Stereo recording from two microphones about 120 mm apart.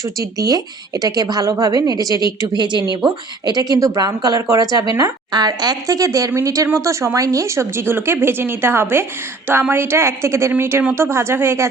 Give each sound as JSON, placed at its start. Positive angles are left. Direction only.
{"t": 0.0, "sound": "a woman's voice", "side_deg": -30}